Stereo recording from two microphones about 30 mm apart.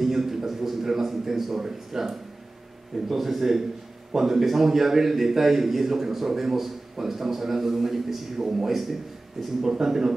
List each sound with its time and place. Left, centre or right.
0.0 s a man's voice: centre